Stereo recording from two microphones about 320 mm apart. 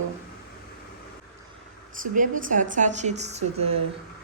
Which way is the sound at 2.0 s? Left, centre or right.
Right.